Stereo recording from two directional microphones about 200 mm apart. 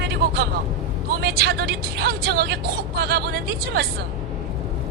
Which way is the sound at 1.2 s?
50° right (ahead or behind).